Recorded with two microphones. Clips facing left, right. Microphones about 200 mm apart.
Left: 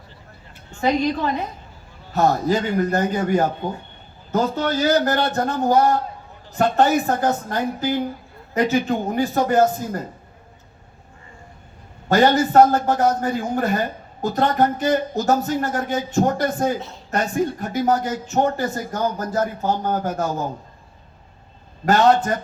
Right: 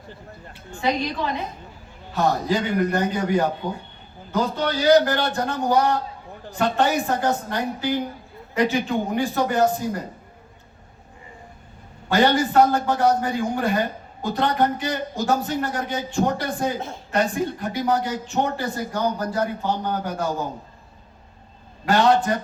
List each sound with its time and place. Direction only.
0.8 s a woman's voice: 45° left (ahead or behind)
8.5 s a man's voice: 40° left (ahead or behind)
12.0 s a man's voice: 40° left (ahead or behind)
21.8 s a man's voice: 40° left (ahead or behind)